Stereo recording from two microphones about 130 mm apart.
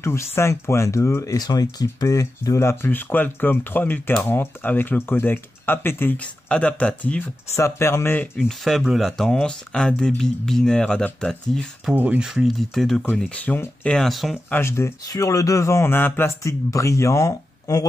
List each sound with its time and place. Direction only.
0.0 s speech: 20° left (ahead or behind)
8.6 s speech: centre (ahead or behind)
11.9 s speech: 15° right (ahead or behind)
12.3 s speech: centre (ahead or behind)
14.5 s speech: 20° left (ahead or behind)